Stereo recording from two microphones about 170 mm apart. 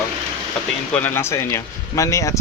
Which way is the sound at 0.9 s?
10° left (ahead or behind).